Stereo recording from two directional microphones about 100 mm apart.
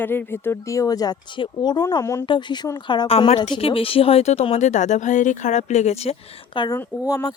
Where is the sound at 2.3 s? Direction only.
50° left (ahead or behind).